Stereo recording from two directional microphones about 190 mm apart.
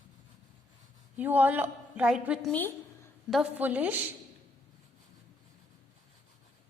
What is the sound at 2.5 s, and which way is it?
Speech, 10° left (ahead or behind).